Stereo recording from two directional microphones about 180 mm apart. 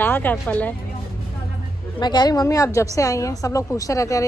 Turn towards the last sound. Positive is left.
turn(degrees=15)  # may be behind; listen again after turning